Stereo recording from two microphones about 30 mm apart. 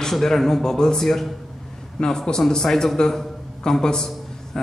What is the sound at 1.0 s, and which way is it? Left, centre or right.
Speech, centre.